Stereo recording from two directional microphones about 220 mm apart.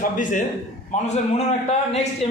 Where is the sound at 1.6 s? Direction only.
30° left (ahead or behind).